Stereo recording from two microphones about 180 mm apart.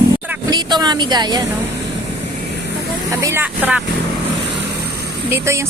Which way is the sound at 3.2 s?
15° right (ahead or behind).